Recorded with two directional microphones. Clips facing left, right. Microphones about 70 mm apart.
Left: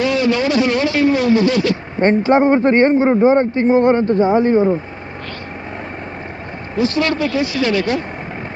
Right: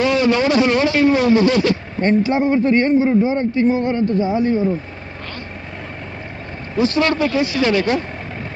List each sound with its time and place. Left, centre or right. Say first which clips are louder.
0.0 s vehicle: even; right
2.0 s speech: left 5 dB; left
6.8 s speech: even; right